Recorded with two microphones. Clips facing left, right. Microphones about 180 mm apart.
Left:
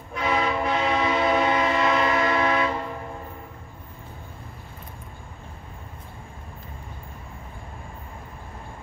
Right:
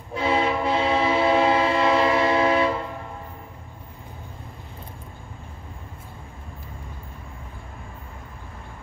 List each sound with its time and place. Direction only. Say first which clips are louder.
0.1 s train: right 2 dB; 30° right (ahead or behind)